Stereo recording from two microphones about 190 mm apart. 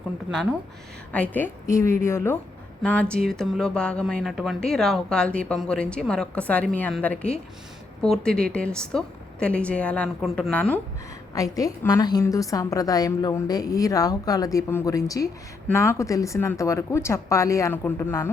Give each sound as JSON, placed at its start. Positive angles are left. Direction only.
{"t": 1.1, "sound": "a woman's voice", "side_deg": 10}
{"t": 11.3, "sound": "a woman's voice", "side_deg": 20}